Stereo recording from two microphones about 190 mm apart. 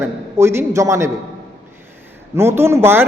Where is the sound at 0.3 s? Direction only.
15° right (ahead or behind).